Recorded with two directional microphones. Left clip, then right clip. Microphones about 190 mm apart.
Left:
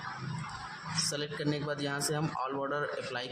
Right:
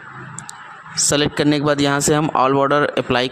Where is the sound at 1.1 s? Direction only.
55° right (ahead or behind).